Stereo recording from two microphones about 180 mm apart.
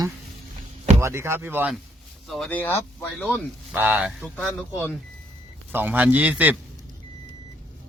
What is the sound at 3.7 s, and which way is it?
Speech, 10° right (ahead or behind).